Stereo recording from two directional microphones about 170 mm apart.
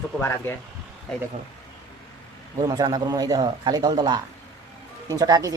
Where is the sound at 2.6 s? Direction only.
25° right (ahead or behind).